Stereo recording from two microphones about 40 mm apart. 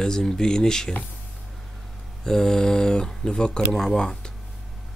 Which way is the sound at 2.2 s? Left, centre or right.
Centre.